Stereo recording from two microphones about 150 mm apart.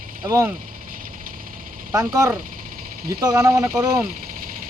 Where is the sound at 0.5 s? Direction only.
70° right (ahead or behind).